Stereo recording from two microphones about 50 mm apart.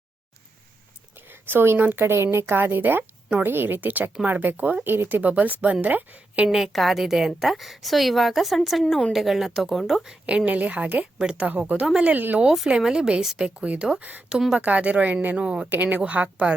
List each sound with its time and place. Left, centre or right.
1.3 s a woman's voice: right
4.8 s a woman's voice: right
6.7 s a woman's voice: centre
10.2 s a woman's voice: right
12.6 s a woman's voice: centre
14.0 s a woman's voice: right
15.4 s a woman's voice: right
15.7 s a woman's voice: right